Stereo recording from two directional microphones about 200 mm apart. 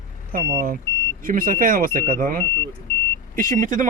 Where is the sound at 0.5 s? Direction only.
45° right (ahead or behind).